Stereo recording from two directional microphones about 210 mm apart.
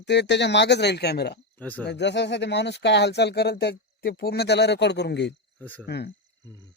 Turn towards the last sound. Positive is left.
turn(degrees=50)  # may be behind; listen again after turning